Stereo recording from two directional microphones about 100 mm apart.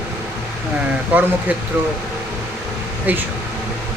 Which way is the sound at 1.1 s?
15° right (ahead or behind).